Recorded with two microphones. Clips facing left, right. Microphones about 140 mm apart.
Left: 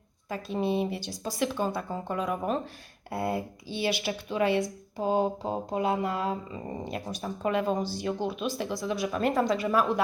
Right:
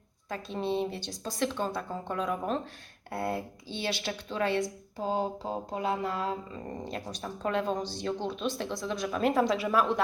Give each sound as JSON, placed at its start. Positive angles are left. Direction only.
{"t": 0.3, "sound": "speech", "side_deg": 5}